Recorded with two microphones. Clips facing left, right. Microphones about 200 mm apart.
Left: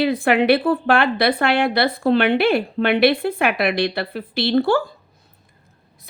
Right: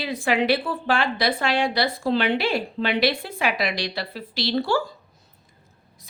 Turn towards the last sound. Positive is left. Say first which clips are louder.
# left 9 dB
turn(degrees=55)  # may be behind; listen again after turning